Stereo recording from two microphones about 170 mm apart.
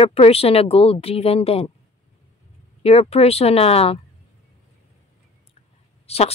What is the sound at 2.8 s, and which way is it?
A woman's voice, 35° left (ahead or behind).